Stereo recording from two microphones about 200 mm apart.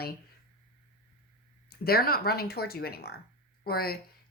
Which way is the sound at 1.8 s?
50° left (ahead or behind).